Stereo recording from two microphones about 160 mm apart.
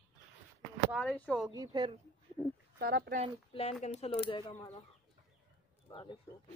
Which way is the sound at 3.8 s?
40° left (ahead or behind).